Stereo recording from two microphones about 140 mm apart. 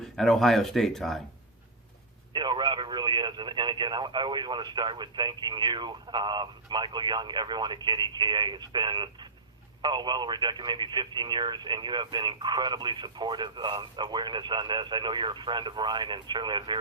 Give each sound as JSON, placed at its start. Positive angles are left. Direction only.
{"t": 0.0, "sound": "speech", "side_deg": 0}
{"t": 2.3, "sound": "speech", "side_deg": -30}